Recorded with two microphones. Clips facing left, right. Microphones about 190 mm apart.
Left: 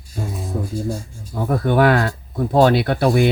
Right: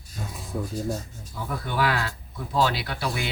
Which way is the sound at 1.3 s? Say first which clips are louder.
Left 13 dB; 55° left (ahead or behind).